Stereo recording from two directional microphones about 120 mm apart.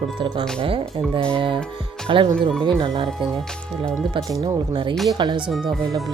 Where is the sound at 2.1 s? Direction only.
45° right (ahead or behind).